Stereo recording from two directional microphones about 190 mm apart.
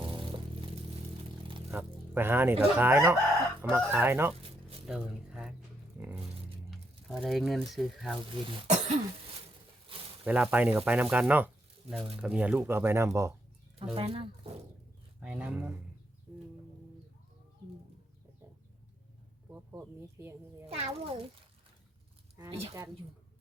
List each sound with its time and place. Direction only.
0.0 s vehicle: 25° right (ahead or behind)
1.7 s speech: 10° right (ahead or behind)
4.9 s a sound: 5° right (ahead or behind)
6.7 s speech: centre (ahead or behind)
8.4 s speech: 25° right (ahead or behind)
10.2 s speech: 10° right (ahead or behind)
13.7 s speech: 30° right (ahead or behind)
15.2 s speech: 5° right (ahead or behind)
19.5 s speech: 10° right (ahead or behind)
20.8 s speech: 25° right (ahead or behind)
22.4 s speech: 30° right (ahead or behind)